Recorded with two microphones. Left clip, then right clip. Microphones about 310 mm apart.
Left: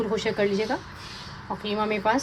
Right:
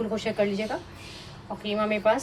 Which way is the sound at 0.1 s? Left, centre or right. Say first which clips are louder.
Left 2 dB; centre.